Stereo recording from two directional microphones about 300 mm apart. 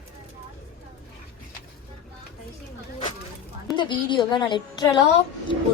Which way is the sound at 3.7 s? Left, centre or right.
Centre.